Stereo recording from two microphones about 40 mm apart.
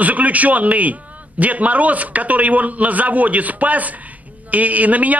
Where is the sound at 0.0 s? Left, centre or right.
Right.